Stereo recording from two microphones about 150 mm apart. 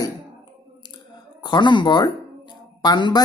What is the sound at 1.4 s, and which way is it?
Speech, 30° left (ahead or behind).